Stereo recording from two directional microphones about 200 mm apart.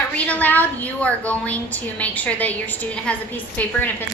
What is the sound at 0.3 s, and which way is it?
A woman's voice, 10° left (ahead or behind).